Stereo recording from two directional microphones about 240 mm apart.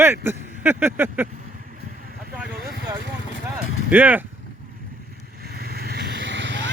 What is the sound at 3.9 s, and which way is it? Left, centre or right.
Speech, centre.